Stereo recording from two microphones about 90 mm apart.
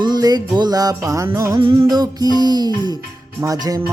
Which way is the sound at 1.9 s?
50° right (ahead or behind).